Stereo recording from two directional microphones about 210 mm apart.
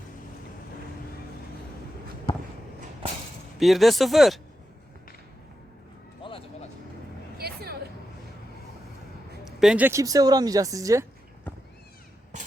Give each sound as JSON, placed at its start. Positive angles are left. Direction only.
{"t": 2.3, "sound": "a sound", "side_deg": 25}
{"t": 3.6, "sound": "speech", "side_deg": 0}
{"t": 6.2, "sound": "music", "side_deg": 25}
{"t": 7.3, "sound": "hubbub", "side_deg": -50}
{"t": 9.4, "sound": "speech", "side_deg": 0}